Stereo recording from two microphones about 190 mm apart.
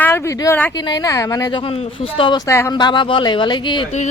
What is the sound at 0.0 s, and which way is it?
Speech, 15° left (ahead or behind).